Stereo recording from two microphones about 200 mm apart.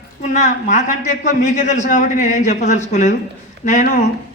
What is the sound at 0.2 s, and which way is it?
A woman's voice, 35° left (ahead or behind).